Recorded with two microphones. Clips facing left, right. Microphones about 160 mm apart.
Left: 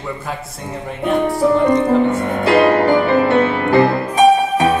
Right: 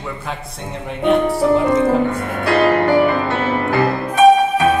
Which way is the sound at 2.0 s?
25° left (ahead or behind).